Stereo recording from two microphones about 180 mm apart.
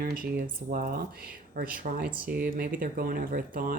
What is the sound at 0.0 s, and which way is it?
Speech, 55° right (ahead or behind).